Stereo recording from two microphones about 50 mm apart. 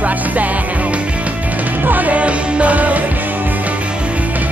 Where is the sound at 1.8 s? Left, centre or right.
Right.